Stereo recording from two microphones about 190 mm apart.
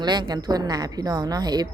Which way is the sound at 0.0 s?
20° right (ahead or behind).